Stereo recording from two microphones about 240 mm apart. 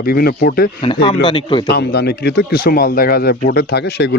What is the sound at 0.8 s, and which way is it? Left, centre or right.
Speech, left.